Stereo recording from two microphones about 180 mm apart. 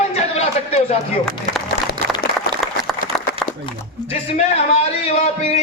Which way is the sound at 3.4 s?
Centre (ahead or behind).